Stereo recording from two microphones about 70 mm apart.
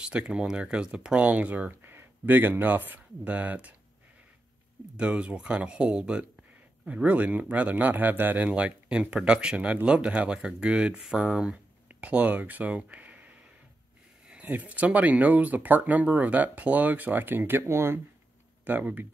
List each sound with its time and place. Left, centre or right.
0.0 s speech: centre
4.9 s speech: centre
14.3 s speech: right
18.6 s speech: right